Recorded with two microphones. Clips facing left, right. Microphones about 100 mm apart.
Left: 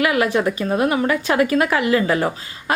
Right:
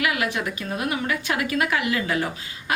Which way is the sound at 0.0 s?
40° left (ahead or behind).